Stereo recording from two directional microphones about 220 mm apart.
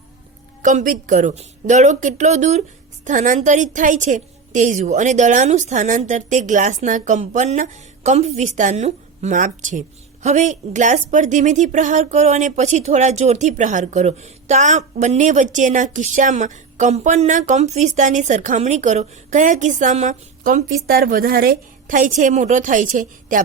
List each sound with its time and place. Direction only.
0.6 s a woman's voice: 35° right (ahead or behind)